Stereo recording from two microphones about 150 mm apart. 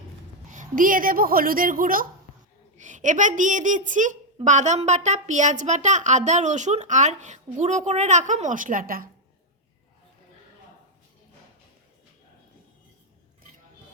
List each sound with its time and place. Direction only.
0.5 s a woman's voice: 60° right (ahead or behind)
2.7 s a woman's voice: 55° right (ahead or behind)